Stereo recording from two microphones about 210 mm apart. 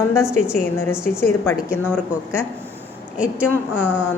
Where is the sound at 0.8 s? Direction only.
10° left (ahead or behind).